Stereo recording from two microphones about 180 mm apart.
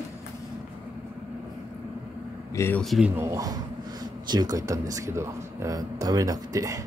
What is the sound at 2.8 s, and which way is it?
Speech, centre (ahead or behind).